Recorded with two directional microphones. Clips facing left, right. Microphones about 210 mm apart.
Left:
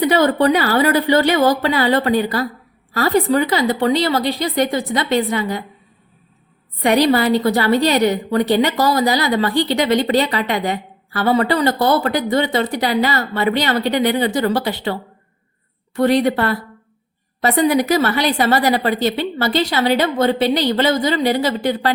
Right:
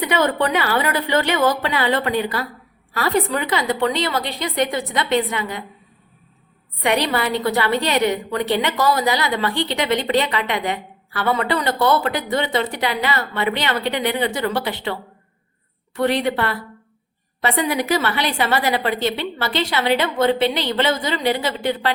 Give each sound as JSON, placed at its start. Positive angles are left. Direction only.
{"t": 0.0, "sound": "a woman's voice", "side_deg": 35}
{"t": 6.8, "sound": "a woman's voice", "side_deg": 40}
{"t": 16.0, "sound": "a woman's voice", "side_deg": 40}